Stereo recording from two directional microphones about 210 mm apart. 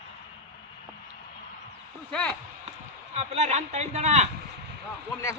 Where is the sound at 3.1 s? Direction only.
30° right (ahead or behind).